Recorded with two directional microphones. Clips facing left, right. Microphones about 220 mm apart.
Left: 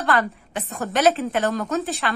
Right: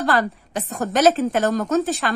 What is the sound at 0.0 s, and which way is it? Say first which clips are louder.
A woman's voice: right 2 dB; 35° right (ahead or behind).